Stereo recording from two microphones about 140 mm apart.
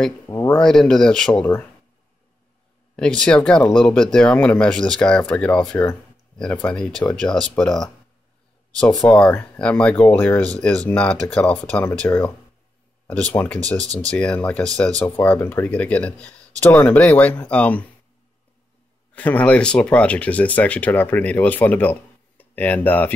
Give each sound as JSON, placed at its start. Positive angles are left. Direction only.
{"t": 0.3, "sound": "speech", "side_deg": 20}
{"t": 0.6, "sound": "speech", "side_deg": 5}
{"t": 3.0, "sound": "speech", "side_deg": 5}
{"t": 19.1, "sound": "speech", "side_deg": 10}